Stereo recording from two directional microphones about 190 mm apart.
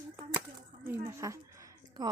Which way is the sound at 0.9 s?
15° right (ahead or behind).